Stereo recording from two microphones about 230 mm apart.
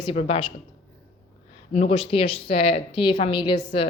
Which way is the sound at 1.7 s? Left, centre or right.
Left.